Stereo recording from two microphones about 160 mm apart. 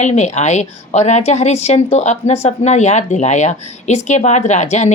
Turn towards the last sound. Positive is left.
turn(degrees=45)  # may be behind; listen again after turning